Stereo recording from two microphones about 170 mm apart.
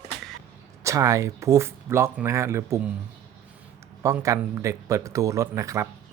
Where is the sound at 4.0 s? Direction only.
20° right (ahead or behind).